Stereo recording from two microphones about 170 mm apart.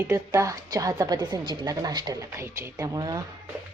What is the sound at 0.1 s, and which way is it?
A woman's voice, 20° right (ahead or behind).